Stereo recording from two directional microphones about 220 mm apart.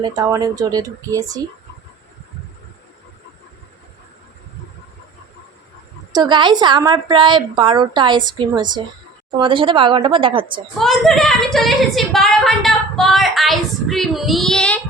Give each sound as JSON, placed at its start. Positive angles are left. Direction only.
{"t": 0.0, "sound": "speech", "side_deg": -15}
{"t": 6.1, "sound": "a woman's voice", "side_deg": -20}
{"t": 10.8, "sound": "a woman's voice", "side_deg": 0}